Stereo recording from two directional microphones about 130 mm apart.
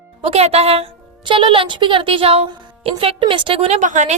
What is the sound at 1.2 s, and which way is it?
A woman's voice, 40° right (ahead or behind).